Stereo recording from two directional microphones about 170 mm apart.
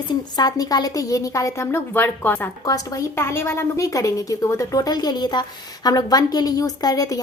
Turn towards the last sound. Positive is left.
turn(degrees=20)  # may be behind; listen again after turning